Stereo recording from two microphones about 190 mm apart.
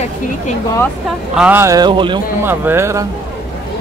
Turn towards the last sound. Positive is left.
turn(degrees=-15)  # may be behind; listen again after turning